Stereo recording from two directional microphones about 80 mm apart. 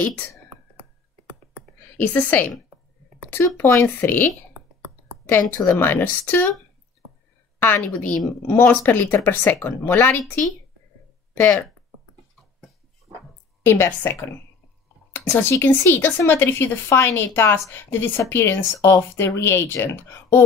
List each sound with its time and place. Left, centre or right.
2.0 s speech: left
5.8 s speech: left
7.5 s speech: left
13.6 s a woman's voice: left
15.1 s speech: left